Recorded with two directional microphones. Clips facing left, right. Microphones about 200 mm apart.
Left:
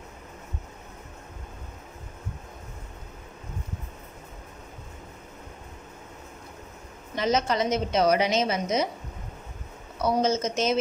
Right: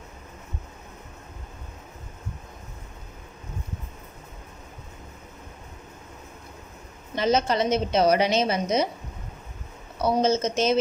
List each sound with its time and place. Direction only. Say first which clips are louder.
7.2 s a woman's voice: right 2 dB; 30° right (ahead or behind)
10.0 s a woman's voice: right 2 dB; 30° right (ahead or behind)